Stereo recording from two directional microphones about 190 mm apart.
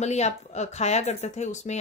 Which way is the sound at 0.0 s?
35° left (ahead or behind).